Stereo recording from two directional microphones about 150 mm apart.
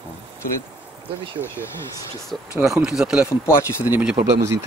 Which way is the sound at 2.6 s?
5° right (ahead or behind).